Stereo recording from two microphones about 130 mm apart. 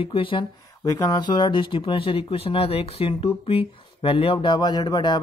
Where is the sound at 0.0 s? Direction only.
45° left (ahead or behind).